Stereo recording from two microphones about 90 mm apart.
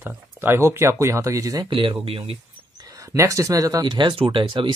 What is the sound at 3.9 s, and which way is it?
Speech, 60° right (ahead or behind).